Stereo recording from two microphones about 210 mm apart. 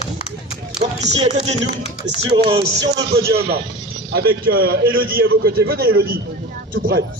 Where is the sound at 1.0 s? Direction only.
30° right (ahead or behind).